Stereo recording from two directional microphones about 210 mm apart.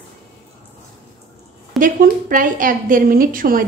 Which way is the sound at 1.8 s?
40° right (ahead or behind).